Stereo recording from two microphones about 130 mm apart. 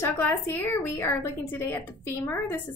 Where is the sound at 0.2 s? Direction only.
15° left (ahead or behind).